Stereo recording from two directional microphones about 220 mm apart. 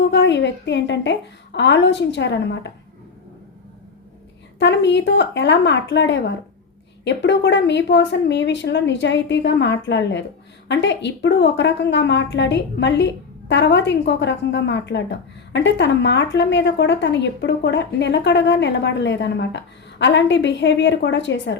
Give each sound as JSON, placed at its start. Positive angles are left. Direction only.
{"t": 0.1, "sound": "a woman's voice", "side_deg": 55}
{"t": 4.6, "sound": "a woman's voice", "side_deg": 55}